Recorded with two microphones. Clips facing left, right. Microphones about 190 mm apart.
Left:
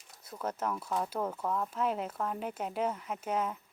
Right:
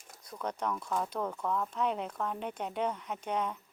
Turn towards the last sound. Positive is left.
turn(degrees=5)  # may be behind; listen again after turning